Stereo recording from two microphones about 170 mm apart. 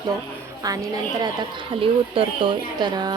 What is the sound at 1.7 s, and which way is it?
A woman's voice, 30° right (ahead or behind).